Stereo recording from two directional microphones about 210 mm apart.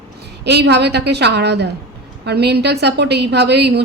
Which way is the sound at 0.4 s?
55° right (ahead or behind).